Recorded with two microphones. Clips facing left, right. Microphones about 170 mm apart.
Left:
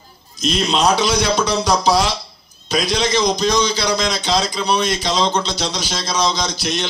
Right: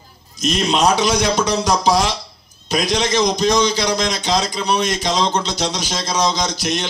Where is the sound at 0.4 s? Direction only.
45° right (ahead or behind).